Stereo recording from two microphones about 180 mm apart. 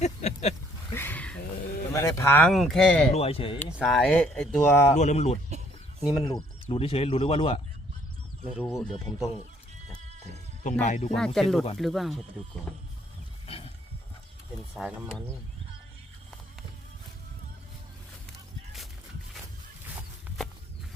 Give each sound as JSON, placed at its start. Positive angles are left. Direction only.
{"t": 0.0, "sound": "a sound", "side_deg": 40}
{"t": 0.9, "sound": "a sound", "side_deg": 10}
{"t": 1.9, "sound": "speech", "side_deg": 15}
{"t": 2.5, "sound": "speech", "side_deg": 0}
{"t": 3.1, "sound": "speech", "side_deg": 35}
{"t": 3.7, "sound": "speech", "side_deg": -5}
{"t": 4.9, "sound": "speech", "side_deg": 40}
{"t": 6.1, "sound": "speech", "side_deg": 25}
{"t": 8.6, "sound": "speech", "side_deg": 10}
{"t": 10.6, "sound": "speech", "side_deg": 40}
{"t": 11.4, "sound": "speech", "side_deg": 0}
{"t": 13.5, "sound": "a sound", "side_deg": 35}
{"t": 14.8, "sound": "speech", "side_deg": -5}
{"t": 20.0, "sound": "a sound", "side_deg": 0}